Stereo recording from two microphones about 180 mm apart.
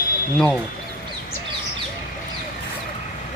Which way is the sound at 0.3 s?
5° left (ahead or behind).